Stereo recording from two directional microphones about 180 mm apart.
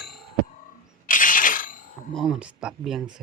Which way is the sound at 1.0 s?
50° left (ahead or behind).